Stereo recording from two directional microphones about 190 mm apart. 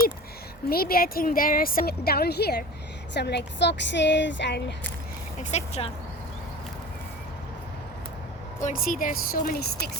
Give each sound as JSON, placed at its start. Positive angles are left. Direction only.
{"t": 0.7, "sound": "a woman's voice", "side_deg": 50}
{"t": 5.4, "sound": "speech", "side_deg": 35}
{"t": 8.6, "sound": "a woman's voice", "side_deg": 45}